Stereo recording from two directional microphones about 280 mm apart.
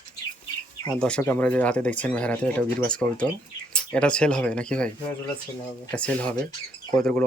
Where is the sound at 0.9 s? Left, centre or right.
Centre.